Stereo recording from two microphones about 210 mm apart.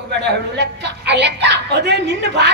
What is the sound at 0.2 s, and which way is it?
A woman's voice, 55° right (ahead or behind).